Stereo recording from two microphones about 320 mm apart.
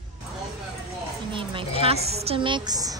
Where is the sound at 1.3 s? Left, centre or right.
Centre.